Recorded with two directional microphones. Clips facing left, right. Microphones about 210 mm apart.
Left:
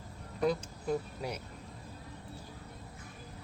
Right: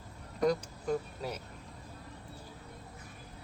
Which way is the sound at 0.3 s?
5° left (ahead or behind).